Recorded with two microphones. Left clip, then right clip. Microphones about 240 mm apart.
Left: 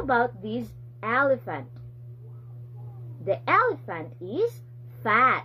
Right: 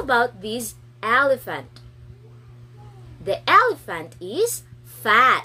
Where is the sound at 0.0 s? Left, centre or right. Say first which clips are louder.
Right 4 dB; centre.